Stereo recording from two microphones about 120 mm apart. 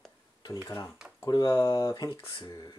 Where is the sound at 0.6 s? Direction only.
30° left (ahead or behind).